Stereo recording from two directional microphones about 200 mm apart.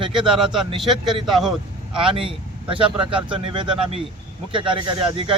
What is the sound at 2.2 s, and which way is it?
Speech, 25° right (ahead or behind).